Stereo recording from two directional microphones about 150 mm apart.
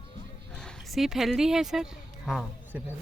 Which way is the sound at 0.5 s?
5° left (ahead or behind).